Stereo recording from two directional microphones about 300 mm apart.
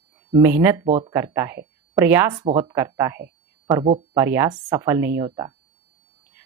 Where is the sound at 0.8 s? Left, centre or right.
Right.